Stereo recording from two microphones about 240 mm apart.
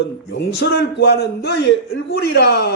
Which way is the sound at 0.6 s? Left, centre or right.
Left.